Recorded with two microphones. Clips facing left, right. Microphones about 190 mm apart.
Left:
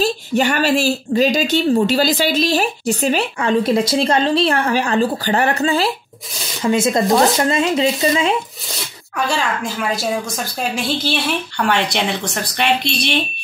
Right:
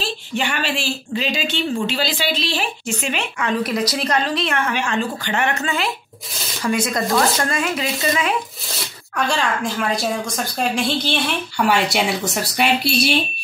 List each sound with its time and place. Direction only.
0.0 s speech: 40° left (ahead or behind)
8.7 s speech: centre (ahead or behind)